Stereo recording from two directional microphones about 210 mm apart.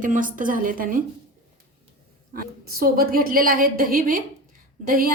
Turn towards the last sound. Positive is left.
turn(degrees=-40)  # may be behind; listen again after turning